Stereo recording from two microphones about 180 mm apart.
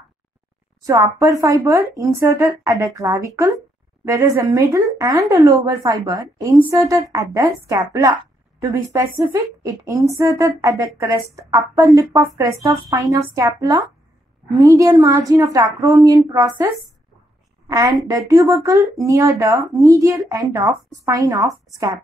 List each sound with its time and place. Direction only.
0.8 s a woman's voice: 15° right (ahead or behind)
17.6 s a woman's voice: 20° right (ahead or behind)